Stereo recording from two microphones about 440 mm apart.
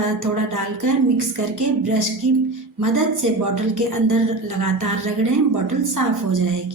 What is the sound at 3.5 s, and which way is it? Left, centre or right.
A woman's voice, right.